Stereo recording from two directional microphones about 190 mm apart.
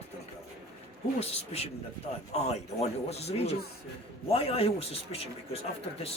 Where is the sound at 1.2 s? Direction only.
35° left (ahead or behind).